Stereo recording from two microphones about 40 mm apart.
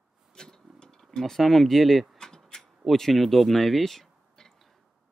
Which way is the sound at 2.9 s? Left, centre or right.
Centre.